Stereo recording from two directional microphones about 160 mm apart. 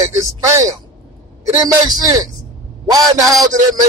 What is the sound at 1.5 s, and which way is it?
A man's voice, 25° right (ahead or behind).